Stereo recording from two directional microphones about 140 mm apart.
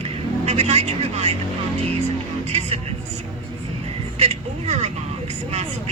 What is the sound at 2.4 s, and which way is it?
Speech, 50° right (ahead or behind).